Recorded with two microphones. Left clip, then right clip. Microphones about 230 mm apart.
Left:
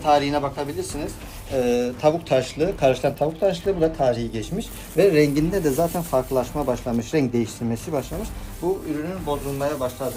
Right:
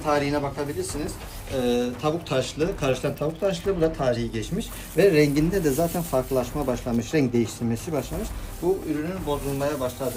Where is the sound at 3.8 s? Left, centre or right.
Centre.